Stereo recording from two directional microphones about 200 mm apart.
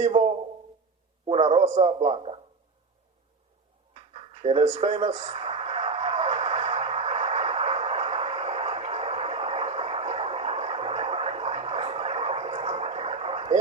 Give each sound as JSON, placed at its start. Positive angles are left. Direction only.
{"t": 0.0, "sound": "a man's voice", "side_deg": -30}
{"t": 4.1, "sound": "speech", "side_deg": -30}
{"t": 5.2, "sound": "radio", "side_deg": -30}